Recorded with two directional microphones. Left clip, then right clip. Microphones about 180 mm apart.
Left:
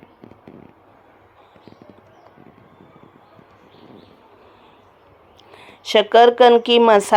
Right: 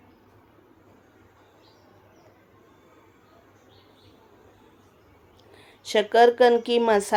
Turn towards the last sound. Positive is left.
turn(degrees=20)  # may be behind; listen again after turning